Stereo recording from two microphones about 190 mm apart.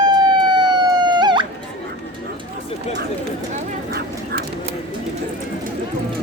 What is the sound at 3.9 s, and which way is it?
Dog, 55° right (ahead or behind).